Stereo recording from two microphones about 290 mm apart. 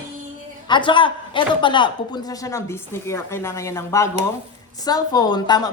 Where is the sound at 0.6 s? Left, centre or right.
Centre.